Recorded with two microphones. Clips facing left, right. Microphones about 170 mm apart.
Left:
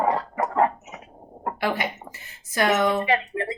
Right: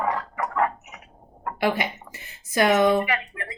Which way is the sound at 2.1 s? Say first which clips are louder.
Right 6 dB; 20° right (ahead or behind).